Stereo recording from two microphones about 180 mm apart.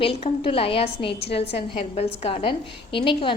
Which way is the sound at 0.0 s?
30° left (ahead or behind).